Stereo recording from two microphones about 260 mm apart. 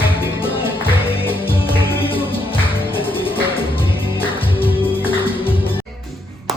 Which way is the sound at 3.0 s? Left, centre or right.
Left.